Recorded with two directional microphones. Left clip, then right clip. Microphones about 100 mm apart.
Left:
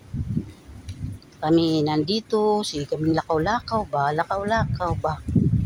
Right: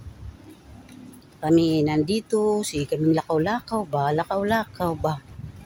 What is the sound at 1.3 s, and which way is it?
Speech, 20° right (ahead or behind).